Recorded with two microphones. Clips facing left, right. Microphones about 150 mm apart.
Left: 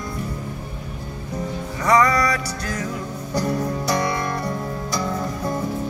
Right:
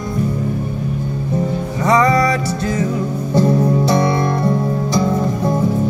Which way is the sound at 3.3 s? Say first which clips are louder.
Right 9 dB; 25° right (ahead or behind).